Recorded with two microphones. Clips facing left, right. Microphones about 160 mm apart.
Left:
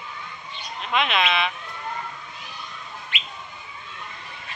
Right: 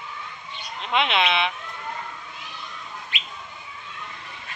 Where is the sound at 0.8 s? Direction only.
25° right (ahead or behind).